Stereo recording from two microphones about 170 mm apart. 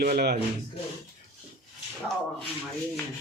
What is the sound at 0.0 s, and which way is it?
Speech, 65° right (ahead or behind).